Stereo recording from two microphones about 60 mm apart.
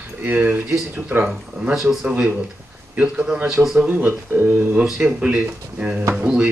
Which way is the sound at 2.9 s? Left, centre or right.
Centre.